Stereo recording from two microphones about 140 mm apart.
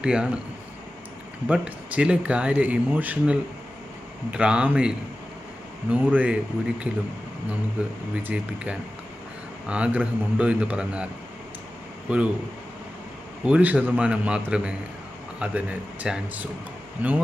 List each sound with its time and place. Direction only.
0.0 s speech: 5° right (ahead or behind)
1.5 s speech: 10° right (ahead or behind)
13.4 s speech: 10° right (ahead or behind)